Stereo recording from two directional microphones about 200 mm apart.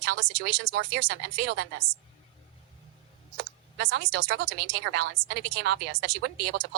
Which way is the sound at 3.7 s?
60° right (ahead or behind).